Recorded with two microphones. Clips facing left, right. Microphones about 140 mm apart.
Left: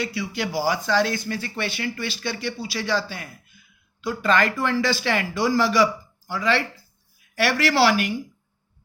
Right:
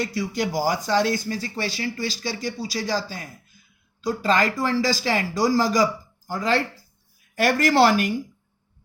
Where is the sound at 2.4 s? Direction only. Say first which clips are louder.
Right 1 dB; 40° right (ahead or behind).